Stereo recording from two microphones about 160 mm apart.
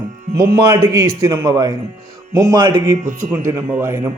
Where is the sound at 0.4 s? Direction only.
20° right (ahead or behind).